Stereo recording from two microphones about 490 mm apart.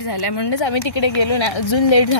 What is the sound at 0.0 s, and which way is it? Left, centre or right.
Speech, left.